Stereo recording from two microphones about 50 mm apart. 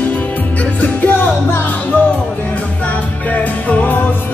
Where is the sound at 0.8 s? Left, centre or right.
Left.